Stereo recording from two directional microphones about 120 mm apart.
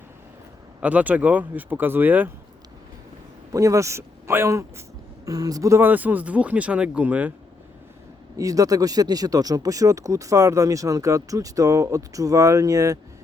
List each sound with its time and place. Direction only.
0.8 s speech: 10° right (ahead or behind)
3.5 s speech: 25° right (ahead or behind)
5.8 s speech: 15° right (ahead or behind)
8.4 s speech: 30° right (ahead or behind)